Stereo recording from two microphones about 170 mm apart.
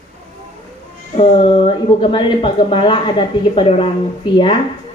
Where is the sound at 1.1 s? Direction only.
35° left (ahead or behind).